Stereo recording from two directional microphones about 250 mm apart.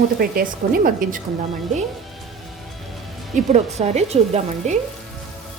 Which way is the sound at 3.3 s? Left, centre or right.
Right.